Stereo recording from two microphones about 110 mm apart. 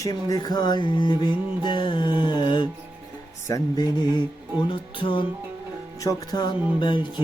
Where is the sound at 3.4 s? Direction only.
30° left (ahead or behind).